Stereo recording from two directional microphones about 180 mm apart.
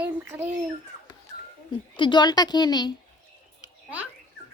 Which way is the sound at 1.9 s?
25° left (ahead or behind).